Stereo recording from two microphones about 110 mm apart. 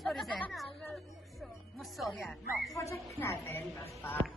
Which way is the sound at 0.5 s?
Centre (ahead or behind).